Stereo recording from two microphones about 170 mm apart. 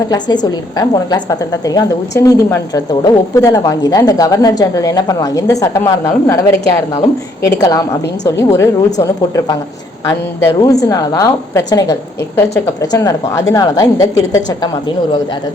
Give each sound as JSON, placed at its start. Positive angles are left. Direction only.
{"t": 0.4, "sound": "a woman's voice", "side_deg": 25}